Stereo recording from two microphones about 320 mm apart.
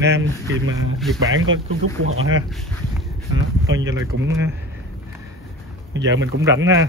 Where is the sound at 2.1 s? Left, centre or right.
Right.